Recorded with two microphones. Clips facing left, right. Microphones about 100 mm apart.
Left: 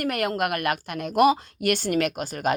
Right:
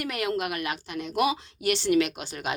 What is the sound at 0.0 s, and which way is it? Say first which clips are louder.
A woman's voice: left 4 dB; 50° left (ahead or behind).